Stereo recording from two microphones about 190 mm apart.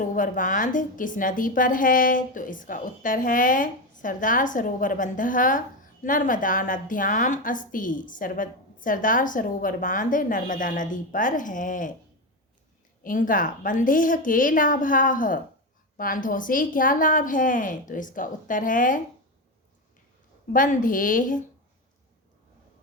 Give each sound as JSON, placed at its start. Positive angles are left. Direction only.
{"t": 0.0, "sound": "a woman's voice", "side_deg": 45}
{"t": 13.0, "sound": "a woman's voice", "side_deg": 45}
{"t": 20.5, "sound": "a woman's voice", "side_deg": 45}